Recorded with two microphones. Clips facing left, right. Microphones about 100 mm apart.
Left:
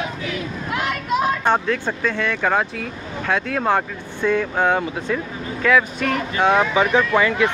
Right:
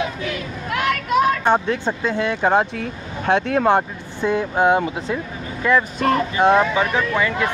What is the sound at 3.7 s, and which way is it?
Speech, 20° right (ahead or behind).